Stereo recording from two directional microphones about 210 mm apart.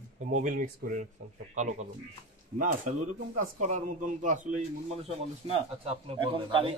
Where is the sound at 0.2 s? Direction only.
35° right (ahead or behind).